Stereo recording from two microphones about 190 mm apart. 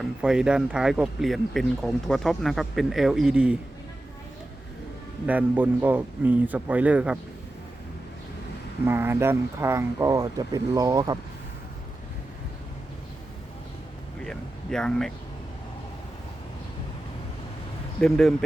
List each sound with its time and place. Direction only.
0.0 s speech: 5° right (ahead or behind)
5.2 s speech: 10° right (ahead or behind)
8.9 s speech: 10° right (ahead or behind)
14.3 s a sound: 5° left (ahead or behind)
18.0 s speech: centre (ahead or behind)